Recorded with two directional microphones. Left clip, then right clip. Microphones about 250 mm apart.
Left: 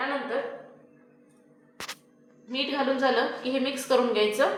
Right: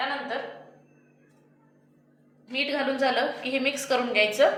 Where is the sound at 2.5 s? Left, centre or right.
Centre.